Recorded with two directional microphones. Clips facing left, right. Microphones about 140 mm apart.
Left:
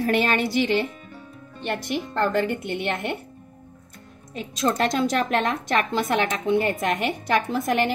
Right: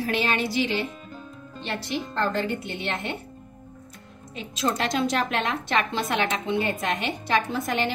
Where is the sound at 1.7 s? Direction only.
50° left (ahead or behind).